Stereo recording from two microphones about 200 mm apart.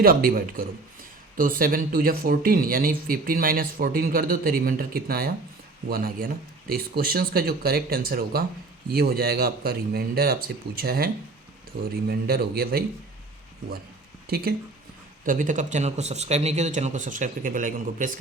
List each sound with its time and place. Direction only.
0.0 s speech: 50° right (ahead or behind)
14.3 s speech: 50° right (ahead or behind)